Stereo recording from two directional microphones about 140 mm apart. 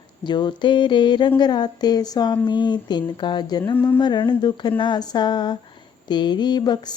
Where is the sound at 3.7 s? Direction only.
15° left (ahead or behind).